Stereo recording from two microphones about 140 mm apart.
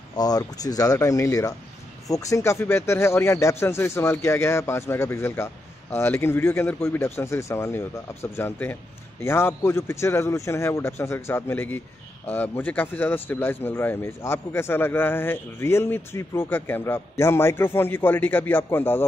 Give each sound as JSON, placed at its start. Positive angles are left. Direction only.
{"t": 0.1, "sound": "a man's voice", "side_deg": 25}